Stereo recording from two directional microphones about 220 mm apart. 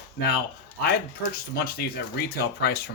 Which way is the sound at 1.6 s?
45° left (ahead or behind).